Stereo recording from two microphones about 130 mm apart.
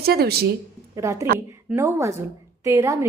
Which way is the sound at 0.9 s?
25° right (ahead or behind).